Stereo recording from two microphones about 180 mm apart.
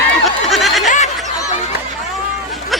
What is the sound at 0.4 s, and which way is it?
Snicker, centre (ahead or behind).